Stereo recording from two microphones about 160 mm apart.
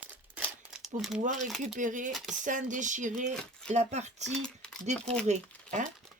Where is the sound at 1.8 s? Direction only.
55° right (ahead or behind).